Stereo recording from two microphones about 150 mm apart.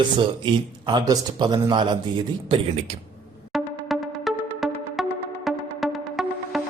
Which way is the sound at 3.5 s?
Centre (ahead or behind).